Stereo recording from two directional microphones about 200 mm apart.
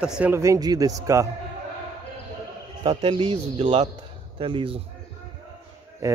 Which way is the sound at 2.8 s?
25° right (ahead or behind).